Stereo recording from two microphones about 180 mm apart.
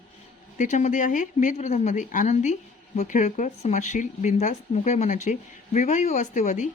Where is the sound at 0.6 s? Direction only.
45° left (ahead or behind).